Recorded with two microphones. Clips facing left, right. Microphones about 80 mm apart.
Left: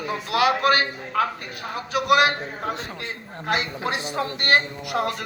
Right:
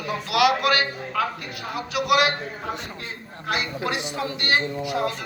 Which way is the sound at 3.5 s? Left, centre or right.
Left.